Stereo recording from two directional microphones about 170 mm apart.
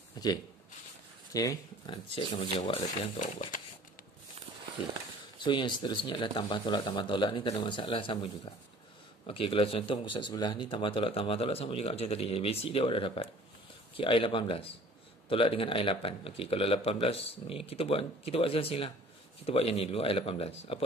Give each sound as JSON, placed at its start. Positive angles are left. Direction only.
{"t": 0.2, "sound": "speech", "side_deg": 25}
{"t": 2.0, "sound": "speech", "side_deg": 30}
{"t": 3.2, "sound": "speech", "side_deg": 50}
{"t": 5.4, "sound": "speech", "side_deg": 30}